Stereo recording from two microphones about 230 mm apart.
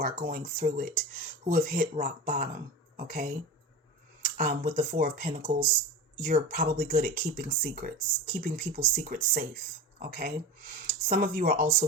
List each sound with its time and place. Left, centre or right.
0.0 s speech: right